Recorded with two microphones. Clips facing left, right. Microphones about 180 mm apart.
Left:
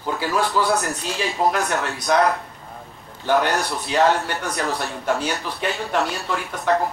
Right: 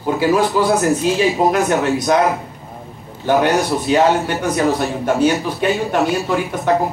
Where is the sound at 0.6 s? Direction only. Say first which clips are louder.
Right 5 dB; 15° right (ahead or behind).